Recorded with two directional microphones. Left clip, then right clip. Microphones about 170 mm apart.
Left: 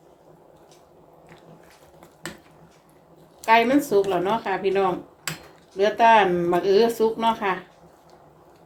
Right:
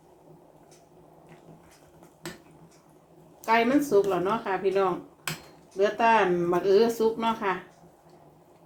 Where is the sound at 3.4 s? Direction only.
25° left (ahead or behind).